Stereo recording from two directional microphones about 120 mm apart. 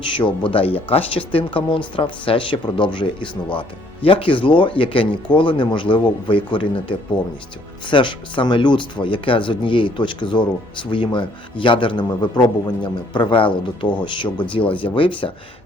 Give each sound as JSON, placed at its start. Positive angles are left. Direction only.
{"t": 0.2, "sound": "a man's voice", "side_deg": 45}